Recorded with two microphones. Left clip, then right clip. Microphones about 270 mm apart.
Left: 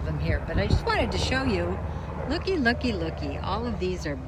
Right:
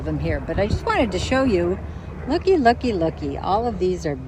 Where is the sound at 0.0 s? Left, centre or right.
Centre.